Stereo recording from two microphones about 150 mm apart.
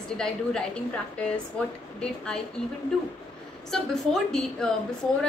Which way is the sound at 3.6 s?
5° left (ahead or behind).